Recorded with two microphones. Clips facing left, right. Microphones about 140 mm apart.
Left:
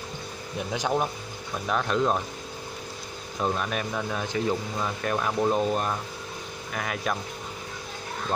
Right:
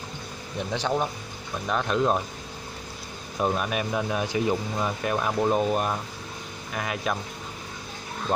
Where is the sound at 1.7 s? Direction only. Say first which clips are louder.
Right 1 dB; centre (ahead or behind).